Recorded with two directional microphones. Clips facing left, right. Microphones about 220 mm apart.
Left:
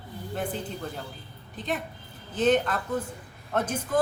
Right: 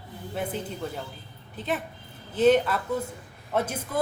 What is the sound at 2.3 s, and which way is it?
A woman's voice, 10° right (ahead or behind).